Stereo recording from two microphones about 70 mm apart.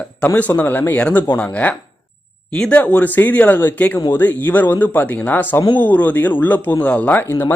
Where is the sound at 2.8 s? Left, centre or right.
Left.